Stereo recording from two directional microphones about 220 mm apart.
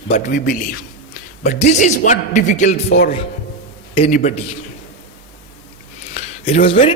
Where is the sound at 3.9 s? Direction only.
25° left (ahead or behind).